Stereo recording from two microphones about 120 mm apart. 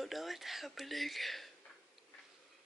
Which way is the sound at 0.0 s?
Centre (ahead or behind).